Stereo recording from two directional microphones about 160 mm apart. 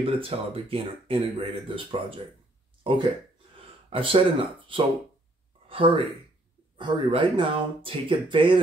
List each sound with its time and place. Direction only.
0.0 s speech: 35° right (ahead or behind)